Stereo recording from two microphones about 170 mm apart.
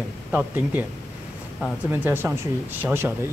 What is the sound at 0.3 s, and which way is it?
Speech, 10° right (ahead or behind).